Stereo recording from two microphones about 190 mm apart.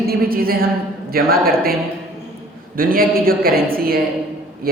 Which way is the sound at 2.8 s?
50° right (ahead or behind).